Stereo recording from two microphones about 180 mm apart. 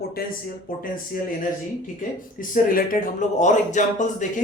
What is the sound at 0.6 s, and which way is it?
Speech, 50° left (ahead or behind).